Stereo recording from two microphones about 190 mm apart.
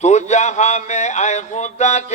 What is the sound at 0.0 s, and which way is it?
Speech, 35° left (ahead or behind).